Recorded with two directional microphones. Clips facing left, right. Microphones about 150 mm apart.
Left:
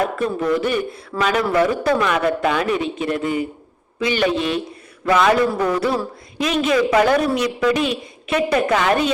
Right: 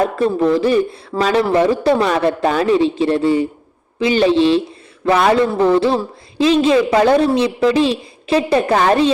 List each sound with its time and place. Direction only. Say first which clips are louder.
0.0 s a man's voice: right 5 dB; 30° right (ahead or behind)